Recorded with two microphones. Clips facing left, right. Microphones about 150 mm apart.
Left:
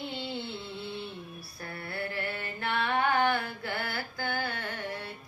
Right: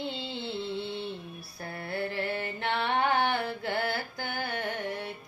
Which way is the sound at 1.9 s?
25° right (ahead or behind).